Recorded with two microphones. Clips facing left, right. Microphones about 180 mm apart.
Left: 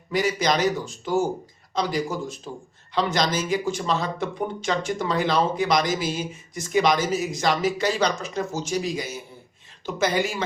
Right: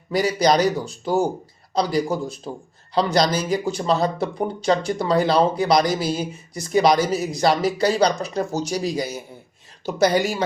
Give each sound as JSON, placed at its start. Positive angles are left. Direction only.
{"t": 0.1, "sound": "speech", "side_deg": -35}